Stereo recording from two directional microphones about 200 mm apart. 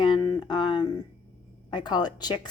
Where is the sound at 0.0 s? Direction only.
20° left (ahead or behind).